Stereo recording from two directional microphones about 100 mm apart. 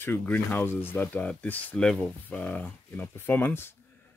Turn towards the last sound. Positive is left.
turn(degrees=20)  # may be behind; listen again after turning